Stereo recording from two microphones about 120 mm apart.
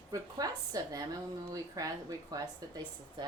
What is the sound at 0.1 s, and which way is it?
Speech, 30° right (ahead or behind).